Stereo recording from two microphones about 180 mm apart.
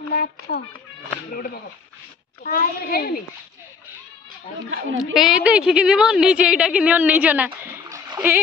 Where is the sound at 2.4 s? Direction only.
55° left (ahead or behind).